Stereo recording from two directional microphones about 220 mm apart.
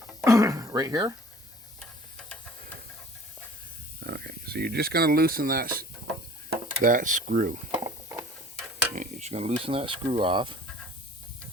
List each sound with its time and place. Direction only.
0.3 s throat clearing: 15° right (ahead or behind)
4.0 s speech: 50° right (ahead or behind)
6.8 s speech: 35° right (ahead or behind)
7.7 s a sound: 10° right (ahead or behind)
9.0 s stir: 30° right (ahead or behind)